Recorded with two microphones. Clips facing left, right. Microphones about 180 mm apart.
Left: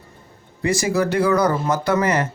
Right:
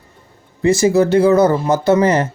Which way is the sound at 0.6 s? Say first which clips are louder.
Right 7 dB; 25° right (ahead or behind).